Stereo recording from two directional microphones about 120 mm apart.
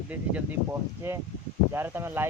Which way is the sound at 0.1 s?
15° right (ahead or behind).